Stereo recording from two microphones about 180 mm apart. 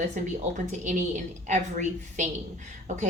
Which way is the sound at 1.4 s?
40° right (ahead or behind).